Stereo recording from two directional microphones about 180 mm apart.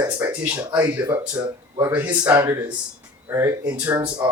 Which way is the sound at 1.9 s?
10° right (ahead or behind).